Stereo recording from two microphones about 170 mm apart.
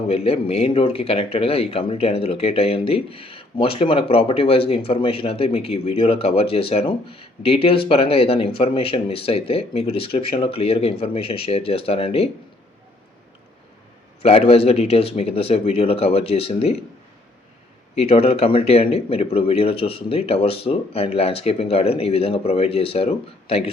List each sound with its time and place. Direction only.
0.1 s speech: 35° left (ahead or behind)
14.2 s speech: 35° left (ahead or behind)
17.9 s speech: 35° left (ahead or behind)